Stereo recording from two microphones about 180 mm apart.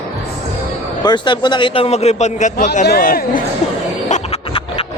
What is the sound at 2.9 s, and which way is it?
Speech, 55° left (ahead or behind).